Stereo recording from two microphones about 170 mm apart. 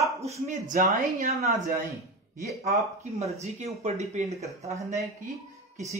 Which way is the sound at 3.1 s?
40° right (ahead or behind).